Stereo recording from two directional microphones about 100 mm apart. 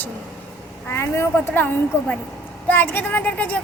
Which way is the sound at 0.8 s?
25° left (ahead or behind).